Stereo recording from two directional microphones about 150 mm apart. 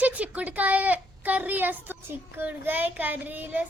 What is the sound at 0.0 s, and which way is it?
Speech, 10° right (ahead or behind).